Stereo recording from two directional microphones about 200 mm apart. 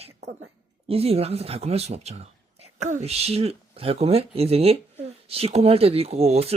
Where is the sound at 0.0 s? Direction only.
35° right (ahead or behind).